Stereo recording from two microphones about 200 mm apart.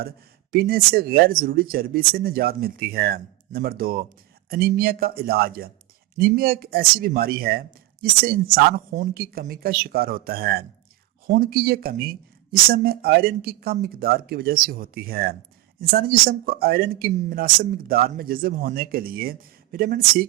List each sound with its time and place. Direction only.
0.5 s speech: 45° right (ahead or behind)